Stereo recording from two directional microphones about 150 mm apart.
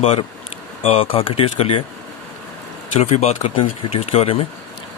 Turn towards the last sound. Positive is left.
turn(degrees=40)  # may be behind; listen again after turning